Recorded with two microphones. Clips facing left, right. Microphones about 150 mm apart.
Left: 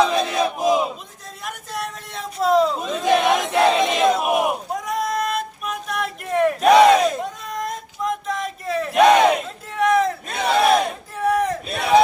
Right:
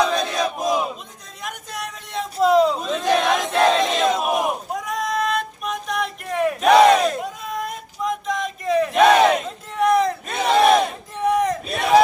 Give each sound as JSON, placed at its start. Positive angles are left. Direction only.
{"t": 0.0, "sound": "battle cry", "side_deg": 5}
{"t": 1.5, "sound": "a sound", "side_deg": 0}
{"t": 11.2, "sound": "crowd", "side_deg": 5}